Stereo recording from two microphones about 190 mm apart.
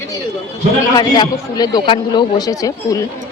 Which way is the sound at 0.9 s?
20° left (ahead or behind).